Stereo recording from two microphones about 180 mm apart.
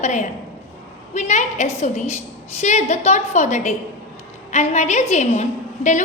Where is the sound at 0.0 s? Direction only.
40° left (ahead or behind).